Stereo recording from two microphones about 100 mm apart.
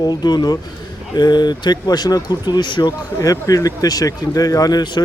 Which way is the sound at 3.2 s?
35° left (ahead or behind).